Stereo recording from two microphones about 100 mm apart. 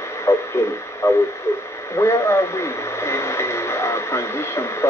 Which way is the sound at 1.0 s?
30° left (ahead or behind).